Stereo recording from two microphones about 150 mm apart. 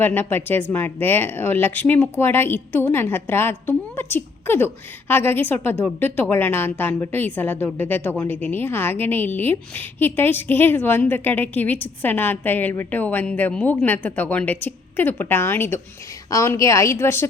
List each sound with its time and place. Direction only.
0.0 s a woman's voice: 15° left (ahead or behind)